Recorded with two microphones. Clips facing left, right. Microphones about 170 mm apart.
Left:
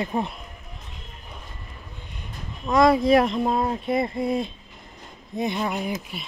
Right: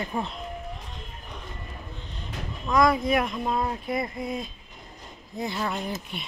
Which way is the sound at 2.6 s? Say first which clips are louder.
Left 4 dB; 30° left (ahead or behind).